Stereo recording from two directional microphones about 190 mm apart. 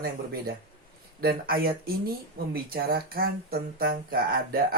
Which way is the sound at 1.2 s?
50° right (ahead or behind).